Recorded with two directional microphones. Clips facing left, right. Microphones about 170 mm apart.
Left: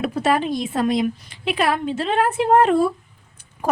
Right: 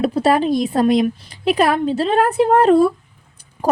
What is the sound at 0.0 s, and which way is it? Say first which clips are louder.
A woman's voice: right 4 dB; 35° right (ahead or behind).